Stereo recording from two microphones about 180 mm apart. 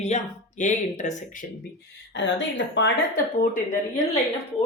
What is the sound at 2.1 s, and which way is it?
Speech, 85° left.